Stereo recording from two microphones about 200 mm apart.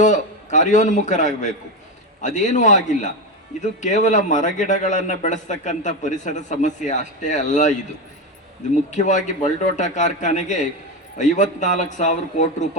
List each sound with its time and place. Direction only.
0.0 s a man's voice: 35° left (ahead or behind)
8.9 s a man's voice: 35° left (ahead or behind)